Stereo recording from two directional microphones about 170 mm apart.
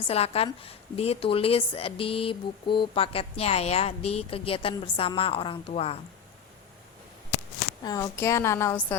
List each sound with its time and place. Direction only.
0.1 s a woman's voice: 35° left (ahead or behind)
7.9 s a woman's voice: 20° left (ahead or behind)